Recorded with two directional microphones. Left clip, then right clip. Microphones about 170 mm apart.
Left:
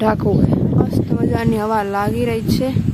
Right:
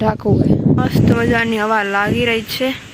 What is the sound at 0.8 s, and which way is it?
Speech, 15° left (ahead or behind).